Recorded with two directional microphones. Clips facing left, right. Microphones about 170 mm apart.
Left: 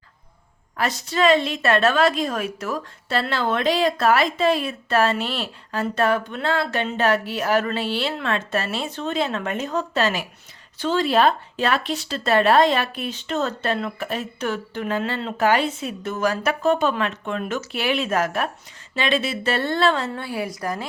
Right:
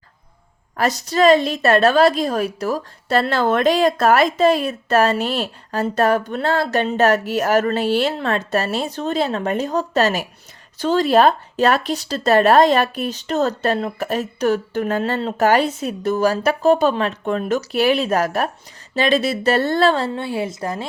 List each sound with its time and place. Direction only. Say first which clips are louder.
0.8 s a woman's voice: right 4 dB; 40° right (ahead or behind)
20.1 s a woman's voice: right 4 dB; 25° right (ahead or behind)